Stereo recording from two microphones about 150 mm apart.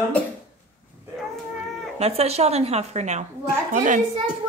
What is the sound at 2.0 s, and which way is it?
A woman's voice, 45° right (ahead or behind).